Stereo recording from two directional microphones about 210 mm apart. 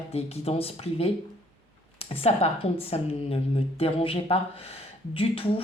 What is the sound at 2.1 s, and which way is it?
Speech, 30° left (ahead or behind).